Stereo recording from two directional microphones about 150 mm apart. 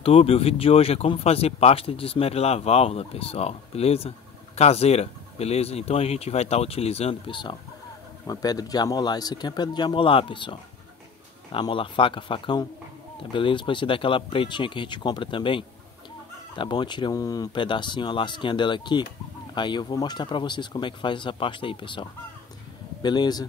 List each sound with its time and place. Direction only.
0.0 s speech: 40° left (ahead or behind)
23.0 s speech: 30° left (ahead or behind)